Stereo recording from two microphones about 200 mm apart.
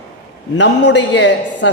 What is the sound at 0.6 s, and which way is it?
A man's voice, 60° left (ahead or behind).